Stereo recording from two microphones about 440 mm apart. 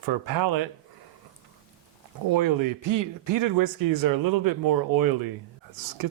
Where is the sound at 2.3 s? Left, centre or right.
Right.